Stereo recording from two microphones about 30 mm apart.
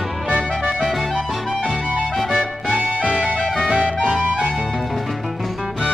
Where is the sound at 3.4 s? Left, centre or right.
Centre.